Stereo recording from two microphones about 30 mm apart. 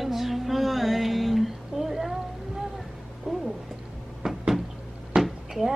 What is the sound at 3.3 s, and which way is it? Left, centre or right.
Cat, centre.